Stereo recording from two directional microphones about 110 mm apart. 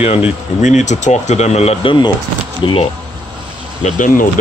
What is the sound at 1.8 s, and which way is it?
Speech, 45° left (ahead or behind).